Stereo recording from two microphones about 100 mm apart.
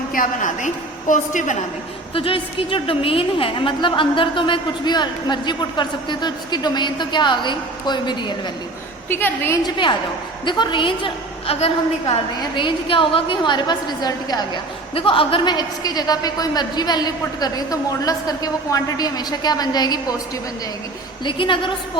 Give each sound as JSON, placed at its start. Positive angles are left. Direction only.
{"t": 2.1, "sound": "a woman's voice", "side_deg": 65}
{"t": 9.0, "sound": "a woman's voice", "side_deg": 20}
{"t": 9.6, "sound": "a woman's voice", "side_deg": 50}
{"t": 12.4, "sound": "a woman's voice", "side_deg": 55}
{"t": 14.9, "sound": "a woman's voice", "side_deg": 65}
{"t": 15.5, "sound": "a woman's voice", "side_deg": 40}
{"t": 21.2, "sound": "a woman's voice", "side_deg": 55}